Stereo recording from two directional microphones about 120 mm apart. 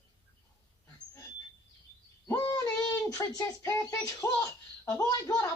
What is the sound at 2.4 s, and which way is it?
Child singing, 30° left (ahead or behind).